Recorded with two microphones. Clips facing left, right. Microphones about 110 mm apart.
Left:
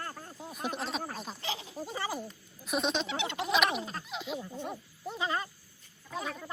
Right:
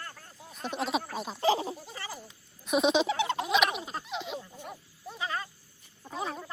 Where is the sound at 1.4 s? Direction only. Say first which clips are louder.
Right 15 dB; 40° right (ahead or behind).